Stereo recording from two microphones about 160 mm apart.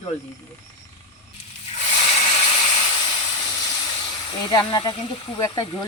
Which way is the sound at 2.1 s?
40° left (ahead or behind).